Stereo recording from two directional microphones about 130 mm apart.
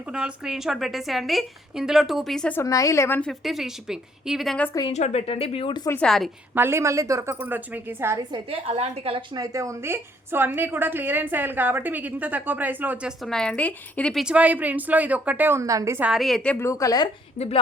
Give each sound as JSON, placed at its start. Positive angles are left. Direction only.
{"t": 0.1, "sound": "a woman's voice", "side_deg": -5}
{"t": 2.6, "sound": "a woman's voice", "side_deg": 25}
{"t": 3.2, "sound": "a woman's voice", "side_deg": 0}
{"t": 4.9, "sound": "speech", "side_deg": 60}
{"t": 6.0, "sound": "a woman's voice", "side_deg": 5}
{"t": 6.5, "sound": "a woman's voice", "side_deg": -20}
{"t": 8.3, "sound": "a woman's voice", "side_deg": -45}
{"t": 9.3, "sound": "a woman's voice", "side_deg": -25}
{"t": 13.2, "sound": "a woman's voice", "side_deg": 5}
{"t": 16.0, "sound": "a woman's voice", "side_deg": -5}
{"t": 16.6, "sound": "a woman's voice", "side_deg": 25}
{"t": 17.3, "sound": "a woman's voice", "side_deg": 55}